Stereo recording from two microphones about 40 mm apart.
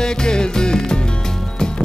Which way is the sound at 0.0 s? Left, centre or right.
Centre.